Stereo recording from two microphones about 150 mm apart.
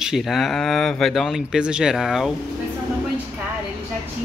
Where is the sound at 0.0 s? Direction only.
Centre (ahead or behind).